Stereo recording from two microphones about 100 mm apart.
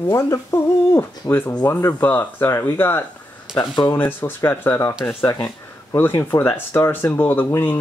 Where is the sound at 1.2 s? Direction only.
40° left (ahead or behind).